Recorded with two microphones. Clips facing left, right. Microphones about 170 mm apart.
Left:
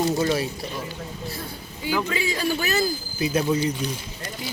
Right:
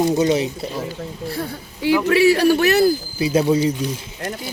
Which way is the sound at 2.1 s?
75° right (ahead or behind).